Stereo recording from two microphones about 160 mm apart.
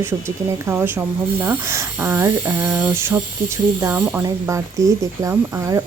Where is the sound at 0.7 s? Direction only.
15° right (ahead or behind).